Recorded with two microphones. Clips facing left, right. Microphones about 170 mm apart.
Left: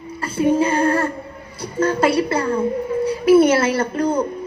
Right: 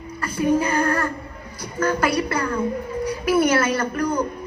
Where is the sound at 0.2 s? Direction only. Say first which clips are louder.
Left 3 dB; 25° left (ahead or behind).